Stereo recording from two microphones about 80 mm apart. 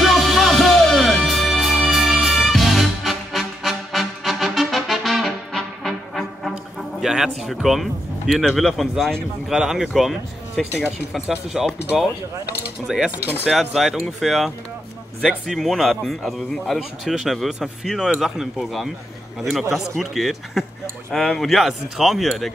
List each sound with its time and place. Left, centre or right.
0.0 s music: centre
7.6 s speech: centre
13.2 s speech: centre
13.5 s speech: centre